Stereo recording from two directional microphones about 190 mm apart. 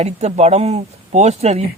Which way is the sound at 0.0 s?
35° right (ahead or behind).